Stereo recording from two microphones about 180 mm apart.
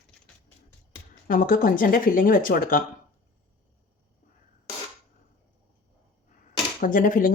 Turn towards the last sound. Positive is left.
turn(degrees=50)  # may be behind; listen again after turning